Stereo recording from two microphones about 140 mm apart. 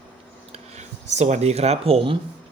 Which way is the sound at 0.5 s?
55° right (ahead or behind).